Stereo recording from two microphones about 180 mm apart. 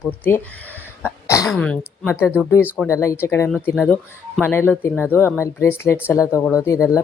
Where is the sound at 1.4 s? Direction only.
5° left (ahead or behind).